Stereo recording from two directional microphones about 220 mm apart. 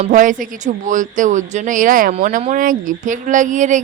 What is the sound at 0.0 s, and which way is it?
Speech, 35° right (ahead or behind).